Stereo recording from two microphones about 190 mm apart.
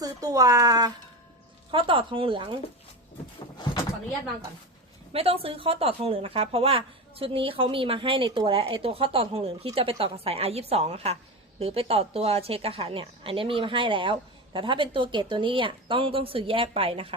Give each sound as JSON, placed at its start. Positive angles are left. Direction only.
{"t": 0.0, "sound": "speech", "side_deg": -20}
{"t": 5.1, "sound": "speech", "side_deg": -30}